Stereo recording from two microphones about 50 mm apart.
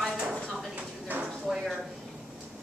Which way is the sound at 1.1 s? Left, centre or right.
Right.